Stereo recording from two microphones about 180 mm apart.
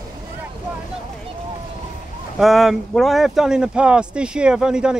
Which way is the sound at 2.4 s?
Centre (ahead or behind).